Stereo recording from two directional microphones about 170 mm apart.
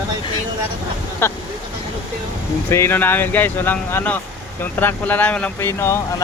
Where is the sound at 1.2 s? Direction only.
15° left (ahead or behind).